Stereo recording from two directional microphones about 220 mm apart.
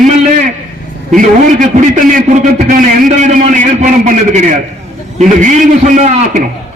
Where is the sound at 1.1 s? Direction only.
35° right (ahead or behind).